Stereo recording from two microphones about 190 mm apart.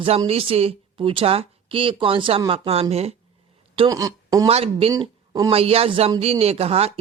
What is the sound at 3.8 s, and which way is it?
Speech, 20° right (ahead or behind).